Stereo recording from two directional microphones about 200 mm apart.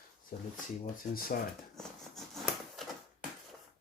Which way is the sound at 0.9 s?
45° left (ahead or behind).